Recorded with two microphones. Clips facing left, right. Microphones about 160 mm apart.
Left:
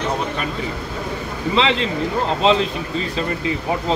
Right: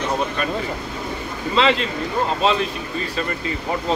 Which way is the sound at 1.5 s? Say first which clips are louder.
Even; 20° left (ahead or behind).